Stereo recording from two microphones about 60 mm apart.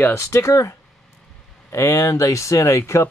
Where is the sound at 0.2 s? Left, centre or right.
Left.